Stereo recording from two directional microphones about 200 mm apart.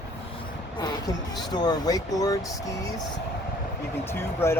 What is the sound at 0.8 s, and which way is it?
Speech, 20° left (ahead or behind).